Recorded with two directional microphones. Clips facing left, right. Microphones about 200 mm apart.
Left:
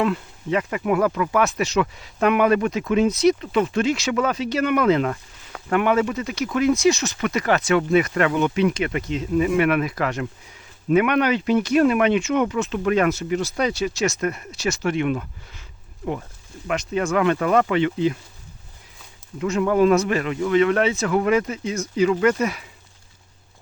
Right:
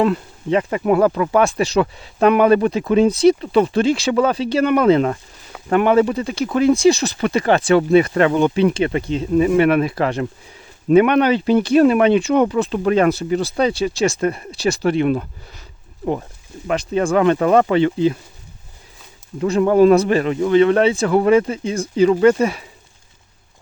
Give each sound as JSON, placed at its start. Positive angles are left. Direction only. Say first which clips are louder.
{"t": 0.0, "sound": "speech", "louder": "right 5 dB", "side_deg": -35}
{"t": 19.4, "sound": "speech", "louder": "right 5 dB", "side_deg": -35}